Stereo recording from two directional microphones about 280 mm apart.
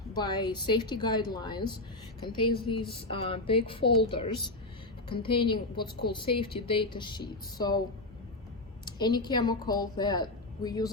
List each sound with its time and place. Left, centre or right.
0.1 s a woman's voice: centre
5.0 s a woman's voice: centre
8.8 s a woman's voice: centre